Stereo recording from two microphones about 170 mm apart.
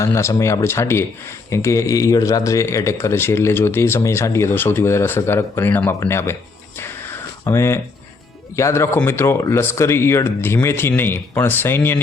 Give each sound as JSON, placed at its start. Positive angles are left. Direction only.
{"t": 0.0, "sound": "speech", "side_deg": 15}
{"t": 6.7, "sound": "a sound", "side_deg": 15}
{"t": 8.5, "sound": "speech", "side_deg": 15}